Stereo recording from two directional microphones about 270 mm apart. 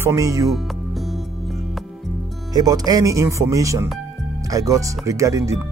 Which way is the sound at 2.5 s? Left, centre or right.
Centre.